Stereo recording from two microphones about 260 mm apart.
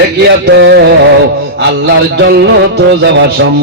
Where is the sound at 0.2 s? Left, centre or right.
Right.